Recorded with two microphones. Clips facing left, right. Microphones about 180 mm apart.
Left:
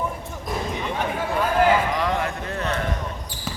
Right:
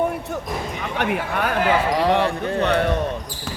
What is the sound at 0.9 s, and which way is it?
Speech, 70° right (ahead or behind).